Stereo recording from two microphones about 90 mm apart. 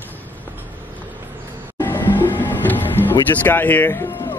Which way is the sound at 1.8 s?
25° left (ahead or behind).